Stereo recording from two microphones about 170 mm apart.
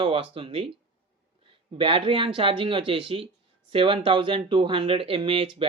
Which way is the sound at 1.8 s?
30° right (ahead or behind).